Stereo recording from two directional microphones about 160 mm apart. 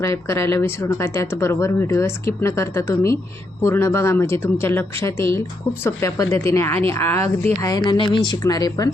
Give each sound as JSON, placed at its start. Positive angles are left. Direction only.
{"t": 0.0, "sound": "speech", "side_deg": 15}